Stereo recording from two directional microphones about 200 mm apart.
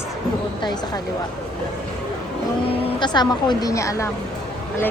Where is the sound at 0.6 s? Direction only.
20° left (ahead or behind).